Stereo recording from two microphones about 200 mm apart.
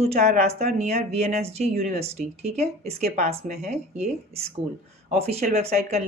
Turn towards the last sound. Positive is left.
turn(degrees=-35)  # may be behind; listen again after turning